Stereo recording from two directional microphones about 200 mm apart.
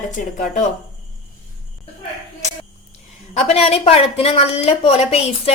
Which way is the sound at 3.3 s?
30° left (ahead or behind).